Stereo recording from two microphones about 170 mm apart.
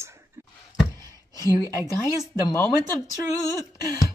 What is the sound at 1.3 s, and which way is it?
Speech, 20° left (ahead or behind).